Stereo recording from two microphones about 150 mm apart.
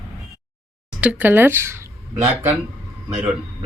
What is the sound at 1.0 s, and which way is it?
Speech, 10° right (ahead or behind).